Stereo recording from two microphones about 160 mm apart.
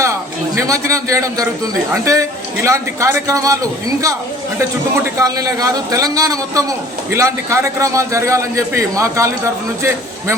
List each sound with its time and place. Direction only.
0.0 s a man's voice: 20° right (ahead or behind)